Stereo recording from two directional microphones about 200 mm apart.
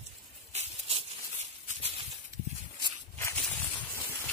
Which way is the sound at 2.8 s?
15° left (ahead or behind).